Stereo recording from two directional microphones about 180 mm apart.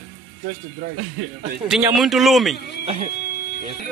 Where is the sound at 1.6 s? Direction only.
Centre (ahead or behind).